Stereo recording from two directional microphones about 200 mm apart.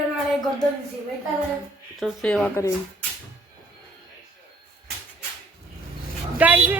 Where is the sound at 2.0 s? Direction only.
5° left (ahead or behind).